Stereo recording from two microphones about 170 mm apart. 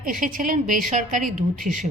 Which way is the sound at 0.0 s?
50° right (ahead or behind).